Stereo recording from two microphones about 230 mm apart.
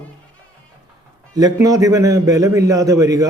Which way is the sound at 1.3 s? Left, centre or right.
Centre.